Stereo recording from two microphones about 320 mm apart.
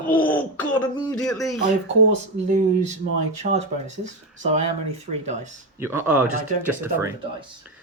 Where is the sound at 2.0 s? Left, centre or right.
Right.